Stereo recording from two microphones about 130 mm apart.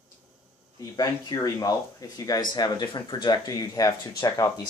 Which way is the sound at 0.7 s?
30° left (ahead or behind).